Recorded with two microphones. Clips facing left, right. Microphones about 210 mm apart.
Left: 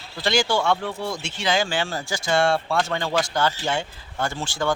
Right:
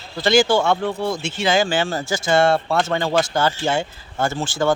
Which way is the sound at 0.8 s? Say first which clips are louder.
Right 6 dB; 25° right (ahead or behind).